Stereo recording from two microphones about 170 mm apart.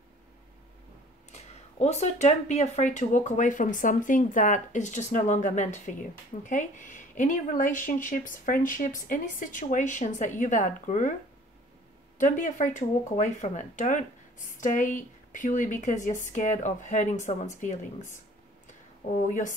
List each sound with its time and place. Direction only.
1.3 s speech: 40° left (ahead or behind)
12.2 s speech: 50° left (ahead or behind)
18.7 s a sound: 50° left (ahead or behind)